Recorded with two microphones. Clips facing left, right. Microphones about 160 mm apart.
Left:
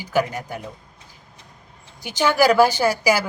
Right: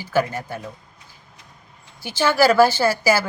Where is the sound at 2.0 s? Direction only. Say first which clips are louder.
Even; 15° left (ahead or behind).